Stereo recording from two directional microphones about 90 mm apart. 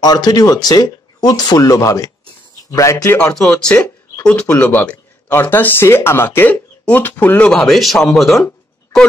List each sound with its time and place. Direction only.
0.0 s a man's voice: 50° left (ahead or behind)
3.3 s speech: 10° left (ahead or behind)
7.5 s speech: centre (ahead or behind)